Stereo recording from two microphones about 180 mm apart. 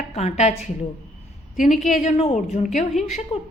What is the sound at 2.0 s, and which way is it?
Speech, 40° left (ahead or behind).